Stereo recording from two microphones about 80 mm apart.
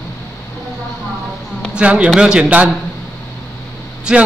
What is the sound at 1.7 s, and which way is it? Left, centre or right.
Speech, centre.